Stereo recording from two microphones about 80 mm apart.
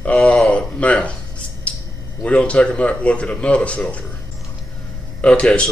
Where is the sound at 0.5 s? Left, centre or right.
Centre.